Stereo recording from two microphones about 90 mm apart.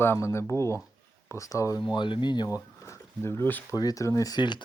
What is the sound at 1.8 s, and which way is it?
Speech, 60° left (ahead or behind).